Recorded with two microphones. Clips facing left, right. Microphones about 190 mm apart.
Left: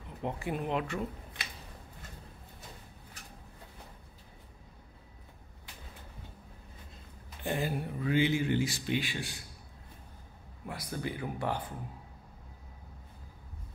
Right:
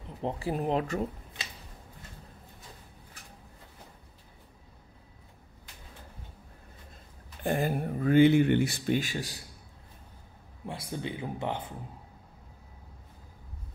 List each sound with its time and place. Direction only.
0.2 s speech: 30° right (ahead or behind)
7.4 s speech: 50° right (ahead or behind)
10.7 s speech: 25° right (ahead or behind)